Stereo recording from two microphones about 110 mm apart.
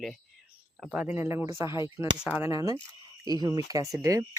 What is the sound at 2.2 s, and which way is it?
Speech, 10° right (ahead or behind).